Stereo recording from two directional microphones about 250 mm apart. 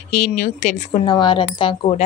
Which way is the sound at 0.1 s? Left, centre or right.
Left.